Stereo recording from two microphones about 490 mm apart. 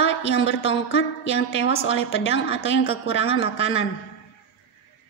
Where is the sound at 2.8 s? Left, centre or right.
Centre.